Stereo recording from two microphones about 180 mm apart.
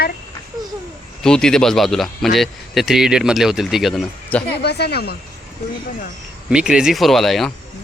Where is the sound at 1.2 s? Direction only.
5° left (ahead or behind).